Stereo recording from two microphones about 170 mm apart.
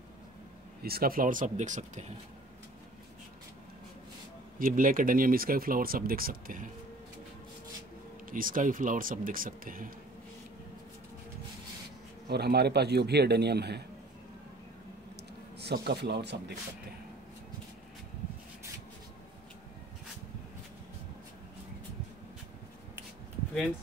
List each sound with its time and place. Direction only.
0.8 s speech: 60° right (ahead or behind); by 2.1 s 45° right (ahead or behind)
4.6 s speech: 55° right (ahead or behind)
8.3 s speech: 55° right (ahead or behind)
12.3 s a man's voice: 70° right (ahead or behind)
15.5 s a man's voice: 75° right (ahead or behind)